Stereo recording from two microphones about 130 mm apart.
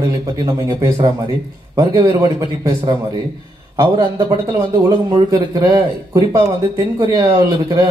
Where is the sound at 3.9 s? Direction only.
30° right (ahead or behind).